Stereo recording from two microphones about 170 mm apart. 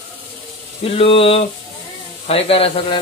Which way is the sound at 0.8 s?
35° left (ahead or behind).